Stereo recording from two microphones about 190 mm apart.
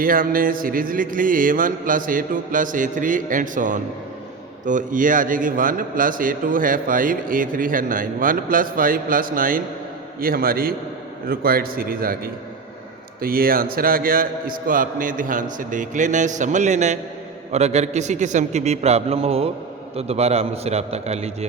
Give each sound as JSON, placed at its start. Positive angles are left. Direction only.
{"t": 0.0, "sound": "a man's voice", "side_deg": -45}